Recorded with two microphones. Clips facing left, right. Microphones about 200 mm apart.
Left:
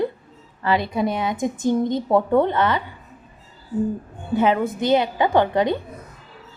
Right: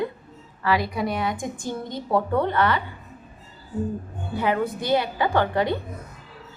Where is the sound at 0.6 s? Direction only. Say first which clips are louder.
Left 3 dB; 25° left (ahead or behind).